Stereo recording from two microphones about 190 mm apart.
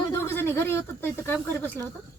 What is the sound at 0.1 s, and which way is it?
Speech, 10° left (ahead or behind).